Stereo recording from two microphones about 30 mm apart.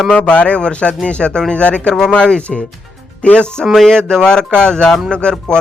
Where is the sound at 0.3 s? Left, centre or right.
Left.